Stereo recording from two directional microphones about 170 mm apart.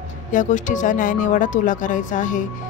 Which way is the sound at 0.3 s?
50° left (ahead or behind).